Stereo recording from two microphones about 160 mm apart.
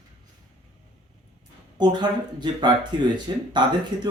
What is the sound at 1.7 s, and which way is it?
Speech, 25° right (ahead or behind).